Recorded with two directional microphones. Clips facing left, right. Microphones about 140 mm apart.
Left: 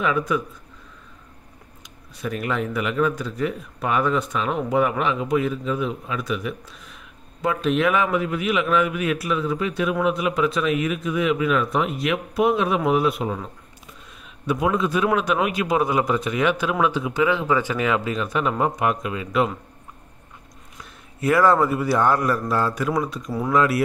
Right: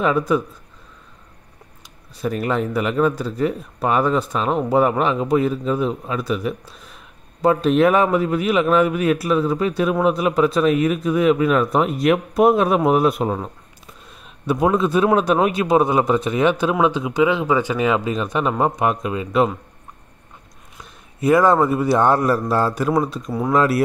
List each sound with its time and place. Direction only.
0.0 s a man's voice: 35° right (ahead or behind)
2.1 s a man's voice: 35° right (ahead or behind)
21.2 s a man's voice: 20° right (ahead or behind)